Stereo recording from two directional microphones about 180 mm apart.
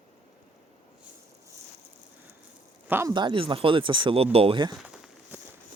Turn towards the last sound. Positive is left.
turn(degrees=-5)  # may be behind; listen again after turning